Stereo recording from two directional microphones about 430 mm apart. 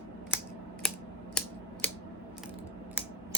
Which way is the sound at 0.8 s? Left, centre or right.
Centre.